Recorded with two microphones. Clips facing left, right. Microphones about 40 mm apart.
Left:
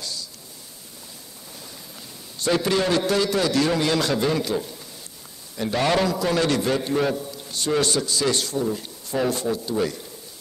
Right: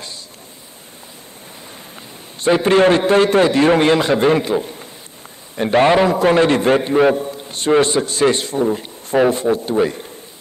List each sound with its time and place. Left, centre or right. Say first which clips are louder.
2.4 s a man's voice: right 9 dB; right